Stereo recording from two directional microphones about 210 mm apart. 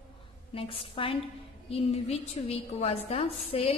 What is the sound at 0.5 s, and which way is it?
A woman's voice, 25° left (ahead or behind).